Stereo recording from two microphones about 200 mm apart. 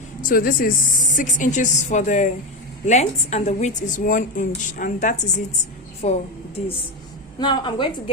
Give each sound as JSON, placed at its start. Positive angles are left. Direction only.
{"t": 0.2, "sound": "a woman's voice", "side_deg": 45}
{"t": 7.3, "sound": "a woman's voice", "side_deg": 20}